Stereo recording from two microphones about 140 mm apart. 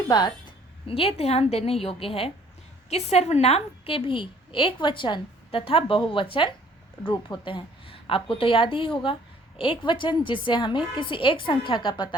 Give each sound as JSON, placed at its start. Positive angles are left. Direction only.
{"t": 0.1, "sound": "a woman's voice", "side_deg": 30}
{"t": 0.9, "sound": "a woman's voice", "side_deg": 45}